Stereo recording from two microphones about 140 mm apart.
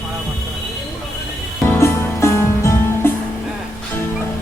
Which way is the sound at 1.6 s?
20° left (ahead or behind).